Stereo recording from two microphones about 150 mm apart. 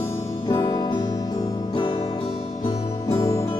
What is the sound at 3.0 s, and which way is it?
Music, 20° left (ahead or behind).